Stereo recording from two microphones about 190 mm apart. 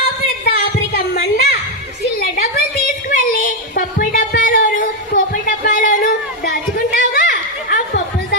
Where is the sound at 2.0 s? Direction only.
55° left (ahead or behind).